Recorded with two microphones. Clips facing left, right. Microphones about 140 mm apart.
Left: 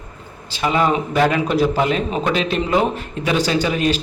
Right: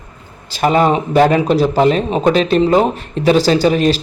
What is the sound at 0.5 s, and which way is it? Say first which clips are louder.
A man's voice: right 5 dB; 45° right (ahead or behind).